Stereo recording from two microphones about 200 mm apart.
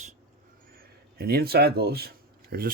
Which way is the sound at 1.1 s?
50° right (ahead or behind).